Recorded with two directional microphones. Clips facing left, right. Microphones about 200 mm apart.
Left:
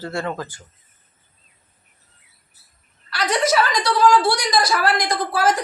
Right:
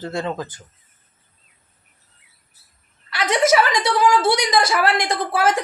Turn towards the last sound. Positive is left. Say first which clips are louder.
# even
turn(degrees=-25)  # may be behind; listen again after turning